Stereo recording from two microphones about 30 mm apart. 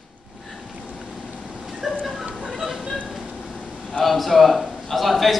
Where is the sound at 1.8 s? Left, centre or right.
Centre.